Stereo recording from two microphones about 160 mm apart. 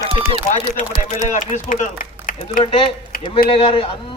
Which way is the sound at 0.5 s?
50° left (ahead or behind).